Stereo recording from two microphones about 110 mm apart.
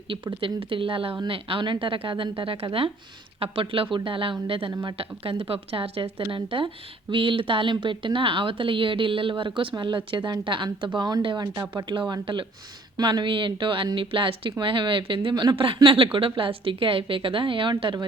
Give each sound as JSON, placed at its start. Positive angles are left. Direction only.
{"t": 0.1, "sound": "speech", "side_deg": -50}